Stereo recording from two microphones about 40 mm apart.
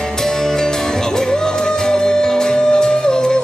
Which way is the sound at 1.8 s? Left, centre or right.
Centre.